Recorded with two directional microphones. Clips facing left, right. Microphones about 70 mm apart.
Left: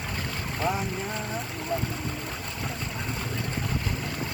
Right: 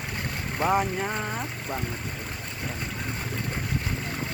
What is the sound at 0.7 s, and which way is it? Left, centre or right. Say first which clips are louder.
Speech: right 9 dB; right.